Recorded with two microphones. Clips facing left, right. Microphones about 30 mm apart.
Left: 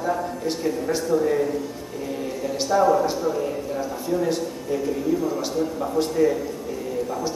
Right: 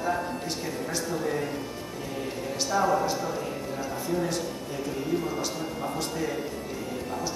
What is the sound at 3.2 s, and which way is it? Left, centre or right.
Speech, centre.